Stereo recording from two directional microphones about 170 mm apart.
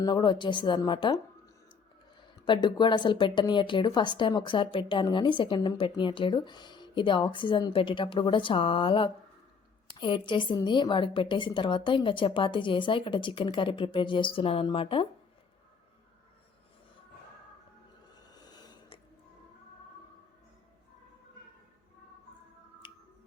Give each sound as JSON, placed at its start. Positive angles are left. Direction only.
{"t": 0.0, "sound": "speech", "side_deg": 25}
{"t": 2.4, "sound": "speech", "side_deg": 25}
{"t": 18.3, "sound": "snort", "side_deg": 25}
{"t": 22.8, "sound": "music", "side_deg": 30}